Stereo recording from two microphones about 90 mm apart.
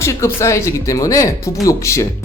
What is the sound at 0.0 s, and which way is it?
Speech, 30° left (ahead or behind).